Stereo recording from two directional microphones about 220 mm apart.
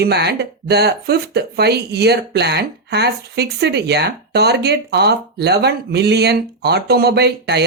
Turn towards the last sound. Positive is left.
turn(degrees=-50)  # may be behind; listen again after turning